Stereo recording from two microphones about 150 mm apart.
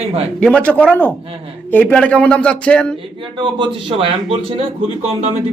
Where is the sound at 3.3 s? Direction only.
35° right (ahead or behind).